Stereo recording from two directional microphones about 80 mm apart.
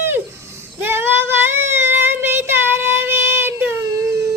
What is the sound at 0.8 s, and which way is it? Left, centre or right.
Child singing, right.